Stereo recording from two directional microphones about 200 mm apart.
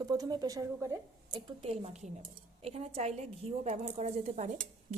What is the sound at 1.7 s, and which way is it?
A woman's voice, 30° right (ahead or behind).